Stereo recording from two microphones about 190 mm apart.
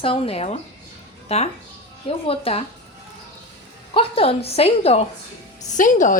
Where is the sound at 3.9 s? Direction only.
30° left (ahead or behind).